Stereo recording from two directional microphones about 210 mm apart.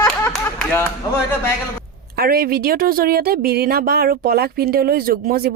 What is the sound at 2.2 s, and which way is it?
Speech, 45° right (ahead or behind).